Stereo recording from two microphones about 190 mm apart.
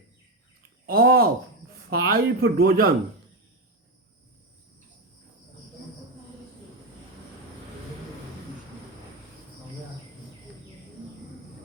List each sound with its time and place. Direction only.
0.9 s speech: 50° right (ahead or behind)